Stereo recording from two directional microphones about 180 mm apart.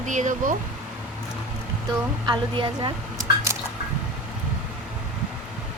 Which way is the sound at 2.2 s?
25° right (ahead or behind).